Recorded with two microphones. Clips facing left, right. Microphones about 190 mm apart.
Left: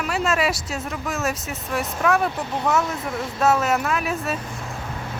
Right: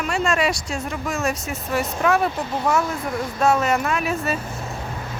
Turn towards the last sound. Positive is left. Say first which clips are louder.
# right 1 dB
turn(degrees=0)  # may be behind; listen again after turning